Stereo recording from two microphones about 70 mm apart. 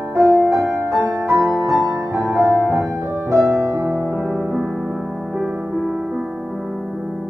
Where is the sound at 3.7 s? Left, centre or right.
Right.